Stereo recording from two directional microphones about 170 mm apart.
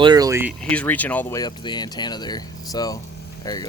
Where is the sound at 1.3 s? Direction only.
25° left (ahead or behind).